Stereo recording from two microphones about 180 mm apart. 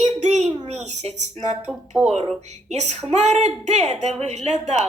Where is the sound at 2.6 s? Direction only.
40° right (ahead or behind).